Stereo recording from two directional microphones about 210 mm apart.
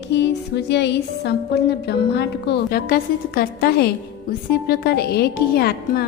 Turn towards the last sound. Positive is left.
turn(degrees=50)  # may be behind; listen again after turning